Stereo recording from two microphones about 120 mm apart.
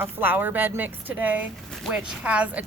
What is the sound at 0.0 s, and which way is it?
Speech, 15° right (ahead or behind).